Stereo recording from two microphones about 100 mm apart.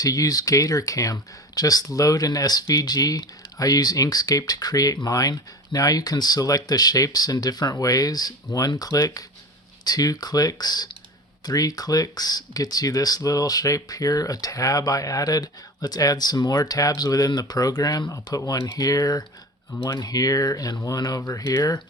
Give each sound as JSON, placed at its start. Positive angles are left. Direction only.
{"t": 0.0, "sound": "speech", "side_deg": 35}
{"t": 18.3, "sound": "speech", "side_deg": 30}